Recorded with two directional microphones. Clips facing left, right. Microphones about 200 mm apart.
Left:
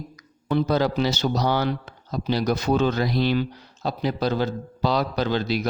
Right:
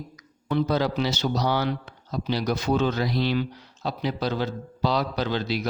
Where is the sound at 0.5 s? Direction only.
40° left (ahead or behind).